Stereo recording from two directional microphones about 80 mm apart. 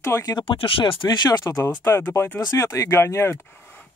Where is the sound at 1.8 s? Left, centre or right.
Left.